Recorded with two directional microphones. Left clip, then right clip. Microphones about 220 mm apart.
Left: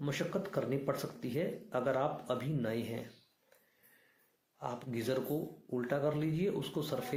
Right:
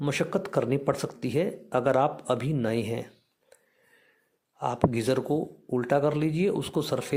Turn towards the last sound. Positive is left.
turn(degrees=-45)  # may be behind; listen again after turning